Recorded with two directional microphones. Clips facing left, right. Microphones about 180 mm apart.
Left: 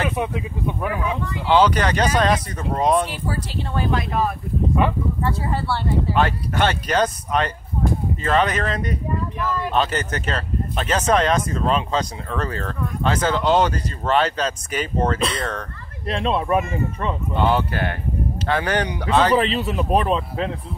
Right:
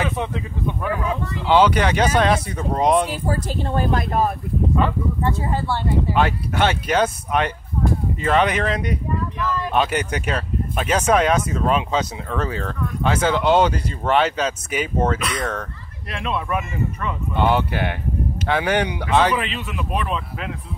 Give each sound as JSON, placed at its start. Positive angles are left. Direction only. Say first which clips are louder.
{"t": 0.0, "sound": "speech", "louder": "left 1 dB", "side_deg": 10}
{"t": 1.5, "sound": "speech", "louder": "right 1 dB", "side_deg": -10}
{"t": 3.1, "sound": "speech", "louder": "right 3 dB", "side_deg": -45}
{"t": 5.2, "sound": "speech", "louder": "right 2 dB", "side_deg": -20}
{"t": 9.4, "sound": "speech", "louder": "even", "side_deg": 10}
{"t": 9.7, "sound": "speech", "louder": "right 2 dB", "side_deg": -10}
{"t": 15.1, "sound": "speech", "louder": "left 1 dB", "side_deg": 30}
{"t": 17.4, "sound": "speech", "louder": "right 1 dB", "side_deg": -10}
{"t": 19.3, "sound": "speech", "louder": "left 6 dB", "side_deg": 35}